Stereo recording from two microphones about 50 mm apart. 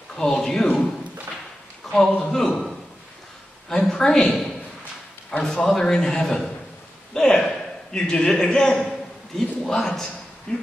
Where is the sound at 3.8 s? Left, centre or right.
Centre.